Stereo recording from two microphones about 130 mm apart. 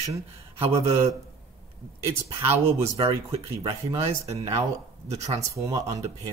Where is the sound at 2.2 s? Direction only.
20° right (ahead or behind).